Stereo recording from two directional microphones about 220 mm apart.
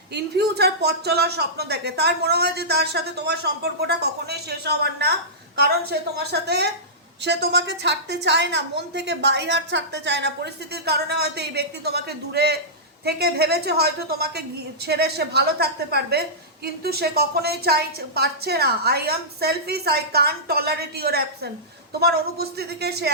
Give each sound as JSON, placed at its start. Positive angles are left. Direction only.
{"t": 0.1, "sound": "a woman's voice", "side_deg": -50}